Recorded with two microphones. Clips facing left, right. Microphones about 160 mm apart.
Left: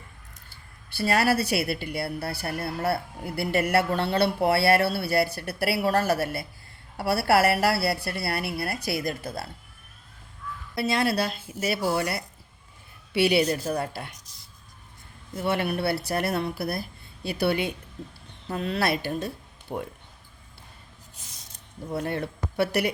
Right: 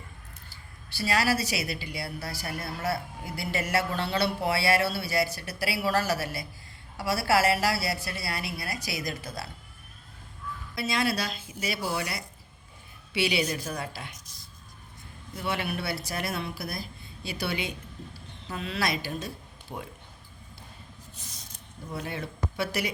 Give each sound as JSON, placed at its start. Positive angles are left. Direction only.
{"t": 0.5, "sound": "a woman's voice", "side_deg": 55}
{"t": 10.8, "sound": "speech", "side_deg": 60}
{"t": 15.4, "sound": "speech", "side_deg": 55}
{"t": 19.7, "sound": "speech", "side_deg": 45}
{"t": 21.9, "sound": "speech", "side_deg": 55}